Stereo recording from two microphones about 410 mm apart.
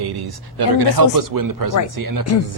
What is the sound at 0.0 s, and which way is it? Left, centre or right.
A woman's voice, right.